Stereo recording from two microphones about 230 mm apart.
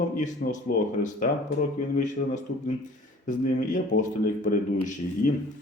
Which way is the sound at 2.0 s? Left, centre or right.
Left.